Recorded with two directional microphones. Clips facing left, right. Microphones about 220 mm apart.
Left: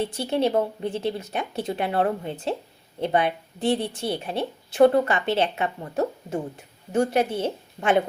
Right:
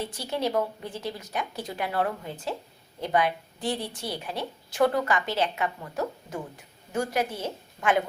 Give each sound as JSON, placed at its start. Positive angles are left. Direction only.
{"t": 0.0, "sound": "a woman's voice", "side_deg": 25}